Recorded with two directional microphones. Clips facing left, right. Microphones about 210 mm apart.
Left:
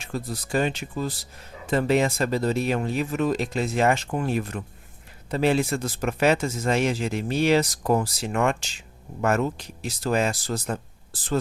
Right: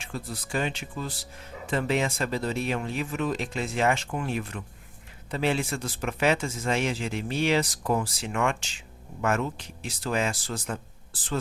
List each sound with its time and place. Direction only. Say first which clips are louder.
0.0 s speech: left 5 dB; 40° left (ahead or behind)